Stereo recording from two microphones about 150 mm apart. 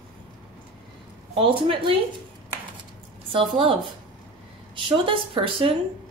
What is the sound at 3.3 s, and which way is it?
A woman's voice, 35° right (ahead or behind).